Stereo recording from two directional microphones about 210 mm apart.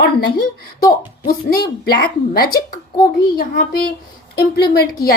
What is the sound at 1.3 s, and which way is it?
Speech, 45° left (ahead or behind).